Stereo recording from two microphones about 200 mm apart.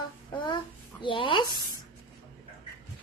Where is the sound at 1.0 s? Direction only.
25° left (ahead or behind).